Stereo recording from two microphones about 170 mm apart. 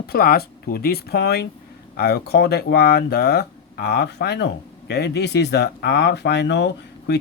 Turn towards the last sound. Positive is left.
turn(degrees=85)